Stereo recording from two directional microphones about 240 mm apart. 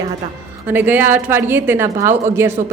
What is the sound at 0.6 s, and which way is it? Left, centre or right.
A woman's voice, centre.